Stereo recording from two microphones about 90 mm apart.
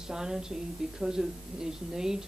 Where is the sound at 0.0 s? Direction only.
5° right (ahead or behind).